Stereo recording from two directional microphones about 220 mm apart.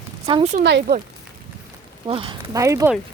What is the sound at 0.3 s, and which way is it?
Speech, 25° right (ahead or behind).